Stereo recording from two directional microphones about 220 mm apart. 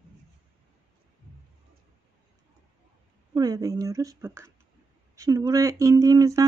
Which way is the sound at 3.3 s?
15° right (ahead or behind).